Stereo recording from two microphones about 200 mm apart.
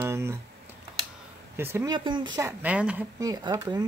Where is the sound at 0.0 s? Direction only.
15° right (ahead or behind).